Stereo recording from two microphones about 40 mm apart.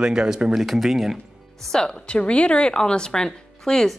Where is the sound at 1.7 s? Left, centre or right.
Left.